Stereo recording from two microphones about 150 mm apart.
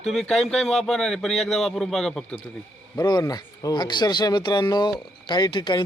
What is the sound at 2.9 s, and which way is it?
A man's voice, 25° left (ahead or behind).